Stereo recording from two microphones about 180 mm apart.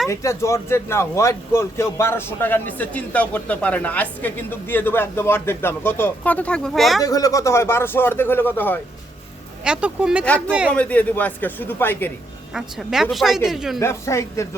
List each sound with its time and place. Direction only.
0.1 s a woman's voice: 15° left (ahead or behind); by 7.0 s centre (ahead or behind)
7.0 s a woman's voice: 20° left (ahead or behind)
9.6 s speech: 5° right (ahead or behind)
10.2 s a woman's voice: 5° left (ahead or behind)
12.5 s speech: centre (ahead or behind)
13.7 s a woman's voice: 15° left (ahead or behind)